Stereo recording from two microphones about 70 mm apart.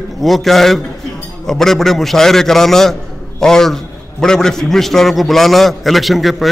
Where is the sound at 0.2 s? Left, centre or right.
Centre.